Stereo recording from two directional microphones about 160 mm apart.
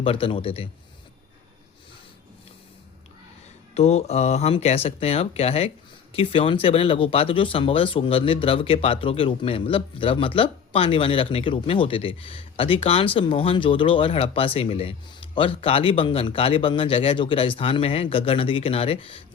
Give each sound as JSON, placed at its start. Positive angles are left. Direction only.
{"t": 0.0, "sound": "speech", "side_deg": 35}
{"t": 3.8, "sound": "speech", "side_deg": 40}